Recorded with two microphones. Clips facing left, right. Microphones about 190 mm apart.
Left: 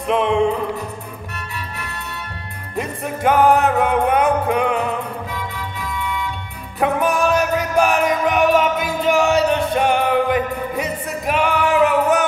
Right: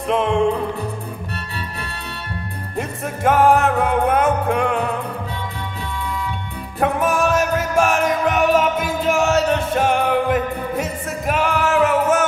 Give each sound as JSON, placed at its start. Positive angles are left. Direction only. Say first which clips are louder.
{"t": 0.1, "sound": "music", "louder": "left 1 dB", "side_deg": 0}
{"t": 2.8, "sound": "music", "louder": "left 1 dB", "side_deg": 0}
{"t": 5.3, "sound": "music", "louder": "even", "side_deg": -30}
{"t": 6.8, "sound": "music", "louder": "left 1 dB", "side_deg": 0}